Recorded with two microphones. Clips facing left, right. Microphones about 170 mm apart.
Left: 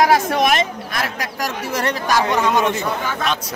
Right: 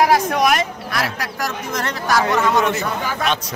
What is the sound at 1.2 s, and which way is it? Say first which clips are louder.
A man's voice: left 1 dB; 10° left (ahead or behind).